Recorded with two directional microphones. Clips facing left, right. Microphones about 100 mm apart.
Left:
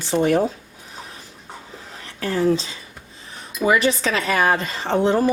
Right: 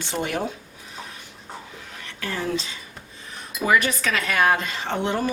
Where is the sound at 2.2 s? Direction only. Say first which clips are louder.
Left 8 dB; 35° left (ahead or behind).